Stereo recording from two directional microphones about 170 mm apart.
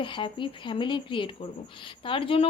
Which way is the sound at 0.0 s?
30° left (ahead or behind).